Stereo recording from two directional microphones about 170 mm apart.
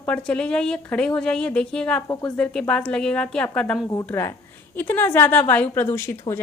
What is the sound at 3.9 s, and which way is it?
A woman's voice, 15° left (ahead or behind).